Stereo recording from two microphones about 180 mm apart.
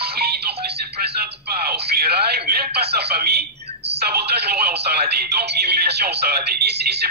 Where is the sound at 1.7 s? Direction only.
60° right (ahead or behind).